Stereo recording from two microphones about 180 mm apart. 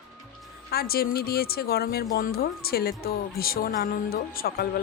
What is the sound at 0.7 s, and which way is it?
Speech, 60° left (ahead or behind).